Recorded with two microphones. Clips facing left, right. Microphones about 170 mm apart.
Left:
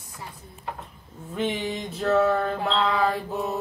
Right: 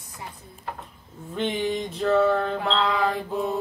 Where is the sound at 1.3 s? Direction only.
5° left (ahead or behind).